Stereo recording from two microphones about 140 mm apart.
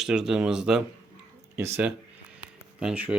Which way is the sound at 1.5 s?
15° right (ahead or behind).